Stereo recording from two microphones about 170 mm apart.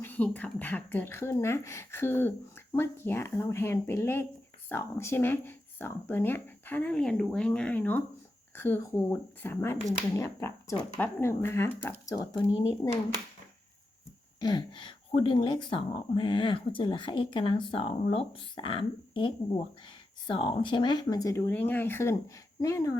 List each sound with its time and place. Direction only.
0.0 s speech: 10° left (ahead or behind)
14.4 s speech: 25° left (ahead or behind)